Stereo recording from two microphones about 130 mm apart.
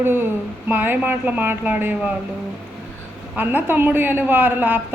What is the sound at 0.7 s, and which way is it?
A woman's voice, 15° right (ahead or behind).